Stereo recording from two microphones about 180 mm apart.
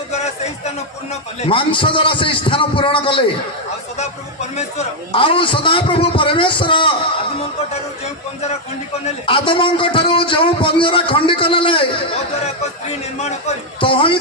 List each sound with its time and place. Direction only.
1.4 s a man's voice: 30° left (ahead or behind)
9.0 s a man's voice: 30° left (ahead or behind)
13.7 s a man's voice: 30° left (ahead or behind)